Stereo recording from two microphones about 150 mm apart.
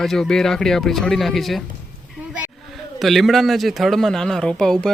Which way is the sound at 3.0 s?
Centre (ahead or behind).